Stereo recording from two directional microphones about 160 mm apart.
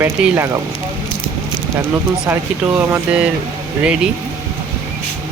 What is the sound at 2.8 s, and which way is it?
Speech, 15° right (ahead or behind).